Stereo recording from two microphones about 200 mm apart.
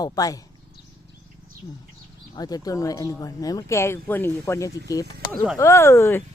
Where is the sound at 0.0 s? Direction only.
20° left (ahead or behind).